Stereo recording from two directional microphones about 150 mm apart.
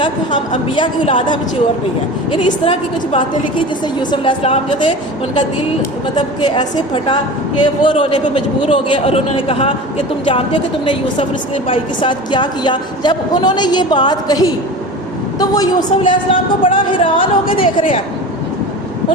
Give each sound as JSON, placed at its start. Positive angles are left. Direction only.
{"t": 0.8, "sound": "a woman's voice", "side_deg": 35}
{"t": 6.1, "sound": "a woman's voice", "side_deg": 30}